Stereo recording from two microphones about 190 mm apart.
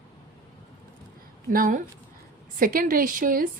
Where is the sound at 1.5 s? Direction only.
45° right (ahead or behind).